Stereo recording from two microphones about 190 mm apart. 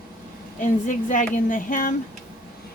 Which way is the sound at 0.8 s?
45° left (ahead or behind).